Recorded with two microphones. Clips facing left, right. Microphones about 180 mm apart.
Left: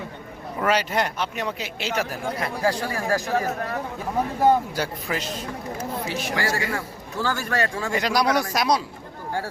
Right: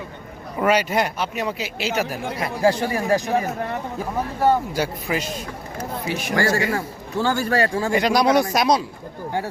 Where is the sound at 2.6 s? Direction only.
25° right (ahead or behind).